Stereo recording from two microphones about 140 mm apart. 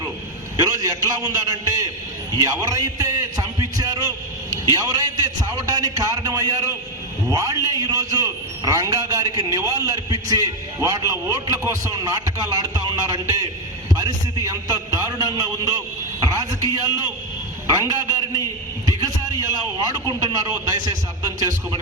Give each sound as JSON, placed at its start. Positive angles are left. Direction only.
{"t": 0.5, "sound": "a man's voice", "side_deg": -25}
{"t": 13.9, "sound": "a sound", "side_deg": -25}
{"t": 17.7, "sound": "a man's voice", "side_deg": -25}